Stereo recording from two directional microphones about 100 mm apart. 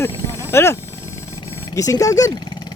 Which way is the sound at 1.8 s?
35° left (ahead or behind).